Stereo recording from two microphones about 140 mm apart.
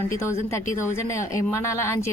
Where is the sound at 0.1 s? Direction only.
20° left (ahead or behind).